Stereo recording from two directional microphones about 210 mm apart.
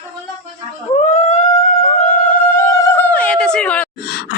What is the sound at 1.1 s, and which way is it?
Howl, 30° left (ahead or behind).